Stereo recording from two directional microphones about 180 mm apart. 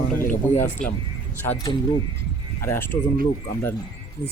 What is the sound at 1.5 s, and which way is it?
Speech, 20° left (ahead or behind).